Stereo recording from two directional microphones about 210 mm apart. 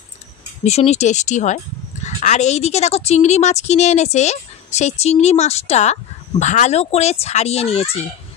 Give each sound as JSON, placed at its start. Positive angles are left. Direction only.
{"t": 0.7, "sound": "a woman's voice", "side_deg": 30}